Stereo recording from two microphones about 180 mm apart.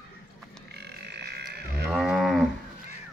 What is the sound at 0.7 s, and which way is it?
Frog, 65° right (ahead or behind).